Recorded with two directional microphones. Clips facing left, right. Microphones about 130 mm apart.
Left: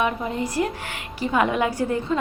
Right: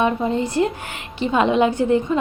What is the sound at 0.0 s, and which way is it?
A woman's voice, 30° right (ahead or behind).